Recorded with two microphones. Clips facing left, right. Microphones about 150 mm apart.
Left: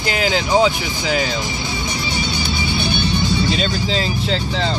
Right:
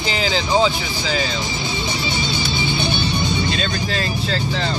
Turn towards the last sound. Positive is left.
turn(degrees=20)  # may be behind; listen again after turning